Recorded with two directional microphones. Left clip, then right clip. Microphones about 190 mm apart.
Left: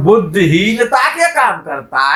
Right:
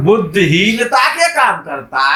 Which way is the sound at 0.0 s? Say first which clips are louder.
Left 1 dB; 30° left (ahead or behind).